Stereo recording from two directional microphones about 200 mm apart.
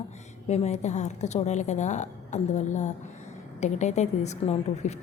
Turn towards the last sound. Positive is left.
turn(degrees=35)  # may be behind; listen again after turning